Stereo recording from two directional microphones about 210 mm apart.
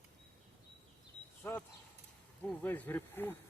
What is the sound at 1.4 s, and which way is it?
Speech, 10° left (ahead or behind).